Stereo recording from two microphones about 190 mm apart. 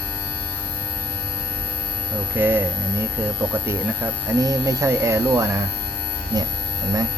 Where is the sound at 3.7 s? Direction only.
15° right (ahead or behind).